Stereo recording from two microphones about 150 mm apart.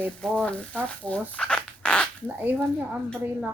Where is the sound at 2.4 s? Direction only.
10° right (ahead or behind).